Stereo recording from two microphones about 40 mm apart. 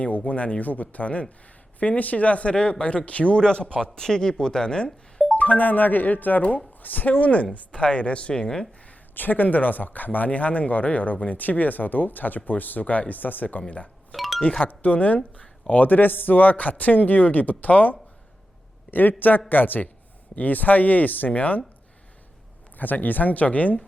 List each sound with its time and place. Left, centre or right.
0.0 s speech: left
3.4 s speech: left
4.9 s music: centre
5.4 s speech: left
8.9 s speech: left
14.2 s music: centre
14.7 s speech: left
22.8 s speech: left